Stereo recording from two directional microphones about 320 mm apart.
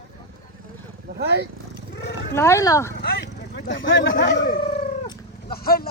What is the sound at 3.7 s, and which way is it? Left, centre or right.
Speech, left.